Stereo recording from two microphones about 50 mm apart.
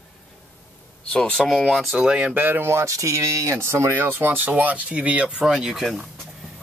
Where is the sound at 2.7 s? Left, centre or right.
Right.